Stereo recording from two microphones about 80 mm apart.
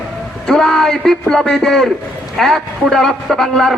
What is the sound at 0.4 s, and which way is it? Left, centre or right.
A man's voice, centre.